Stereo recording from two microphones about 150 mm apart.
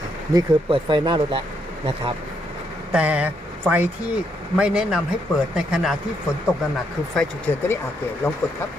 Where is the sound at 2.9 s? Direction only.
10° right (ahead or behind).